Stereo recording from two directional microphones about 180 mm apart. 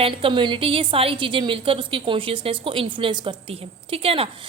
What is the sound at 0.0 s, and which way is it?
A woman's voice, 30° right (ahead or behind).